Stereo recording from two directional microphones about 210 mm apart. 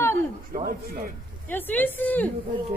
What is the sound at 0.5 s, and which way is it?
Speech, 40° right (ahead or behind).